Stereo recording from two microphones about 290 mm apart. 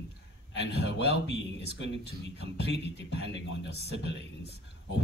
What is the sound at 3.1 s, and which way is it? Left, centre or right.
Speech, left.